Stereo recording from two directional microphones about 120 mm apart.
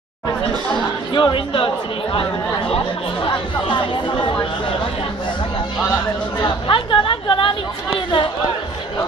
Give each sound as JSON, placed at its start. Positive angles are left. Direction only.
{"t": 0.7, "sound": "speech", "side_deg": 40}
{"t": 2.7, "sound": "speech", "side_deg": 45}
{"t": 6.4, "sound": "chatter", "side_deg": 45}